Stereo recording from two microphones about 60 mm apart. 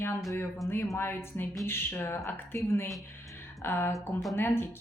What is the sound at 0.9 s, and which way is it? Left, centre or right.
Speech, left.